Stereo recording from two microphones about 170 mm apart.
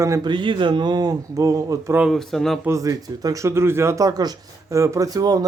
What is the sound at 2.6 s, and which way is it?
Speech, 15° right (ahead or behind).